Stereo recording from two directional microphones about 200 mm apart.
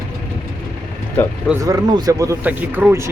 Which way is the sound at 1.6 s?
15° right (ahead or behind).